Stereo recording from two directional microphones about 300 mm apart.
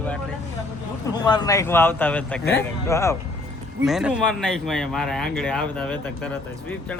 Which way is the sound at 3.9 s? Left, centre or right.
Centre.